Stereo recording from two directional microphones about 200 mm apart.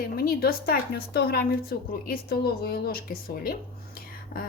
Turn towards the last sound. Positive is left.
turn(degrees=45)  # may be behind; listen again after turning